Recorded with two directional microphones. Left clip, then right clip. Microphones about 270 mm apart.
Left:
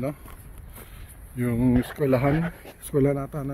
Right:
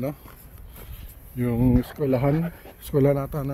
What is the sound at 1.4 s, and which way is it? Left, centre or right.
Speech, centre.